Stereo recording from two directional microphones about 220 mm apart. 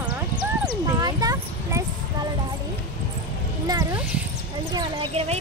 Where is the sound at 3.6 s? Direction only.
15° right (ahead or behind).